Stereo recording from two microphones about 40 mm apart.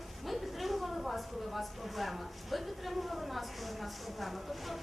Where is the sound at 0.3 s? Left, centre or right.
Centre.